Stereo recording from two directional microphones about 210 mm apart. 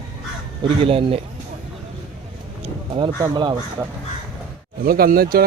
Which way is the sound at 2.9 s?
20° right (ahead or behind).